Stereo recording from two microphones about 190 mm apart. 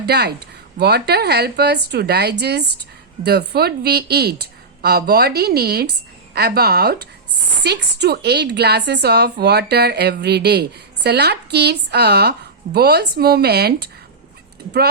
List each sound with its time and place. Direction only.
0.0 s a woman's voice: 60° right (ahead or behind)